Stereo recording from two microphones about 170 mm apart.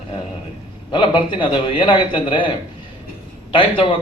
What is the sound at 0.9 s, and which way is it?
A man's voice, 30° left (ahead or behind).